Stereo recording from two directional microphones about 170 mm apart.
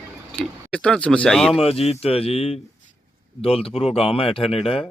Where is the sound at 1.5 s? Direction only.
35° left (ahead or behind).